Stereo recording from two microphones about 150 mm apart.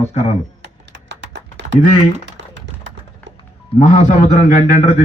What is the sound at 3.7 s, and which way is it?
A man's voice, 45° left (ahead or behind).